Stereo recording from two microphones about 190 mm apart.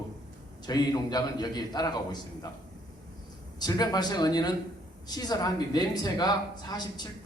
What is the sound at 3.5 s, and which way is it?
A man's voice, 20° left (ahead or behind).